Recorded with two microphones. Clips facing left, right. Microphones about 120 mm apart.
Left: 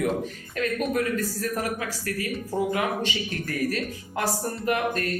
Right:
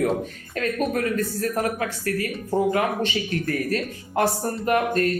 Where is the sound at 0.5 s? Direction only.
40° right (ahead or behind).